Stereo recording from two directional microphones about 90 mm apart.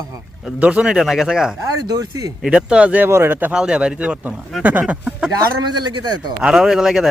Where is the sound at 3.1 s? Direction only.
30° right (ahead or behind).